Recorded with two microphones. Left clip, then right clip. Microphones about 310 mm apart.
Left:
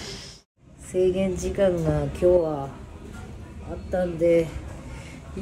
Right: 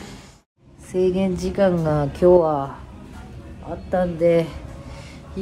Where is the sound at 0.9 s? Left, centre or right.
Centre.